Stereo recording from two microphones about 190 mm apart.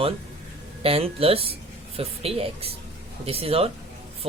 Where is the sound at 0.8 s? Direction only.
30° right (ahead or behind).